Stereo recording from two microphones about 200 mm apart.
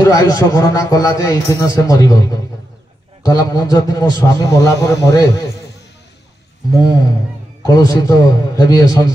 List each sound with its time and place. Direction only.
0.0 s a man's voice: 20° left (ahead or behind)
7.6 s a man's voice: 15° left (ahead or behind)